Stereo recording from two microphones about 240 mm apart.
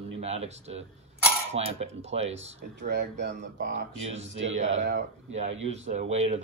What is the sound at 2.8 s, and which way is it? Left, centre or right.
Speech, right.